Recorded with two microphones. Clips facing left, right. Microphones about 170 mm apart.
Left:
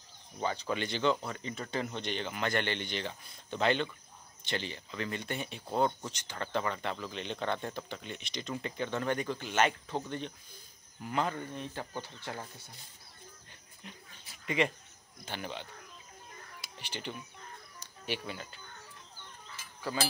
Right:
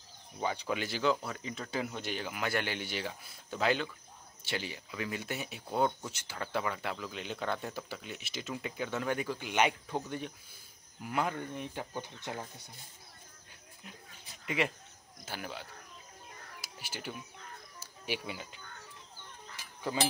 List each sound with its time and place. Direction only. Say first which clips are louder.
0.4 s speech: left 1 dB; 10° right (ahead or behind)
14.4 s a sound: left 2 dB; 5° right (ahead or behind)
15.2 s speech: left 2 dB; 5° right (ahead or behind)
17.7 s cricket: even; 10° right (ahead or behind)
19.8 s speech: right 1 dB; 20° right (ahead or behind)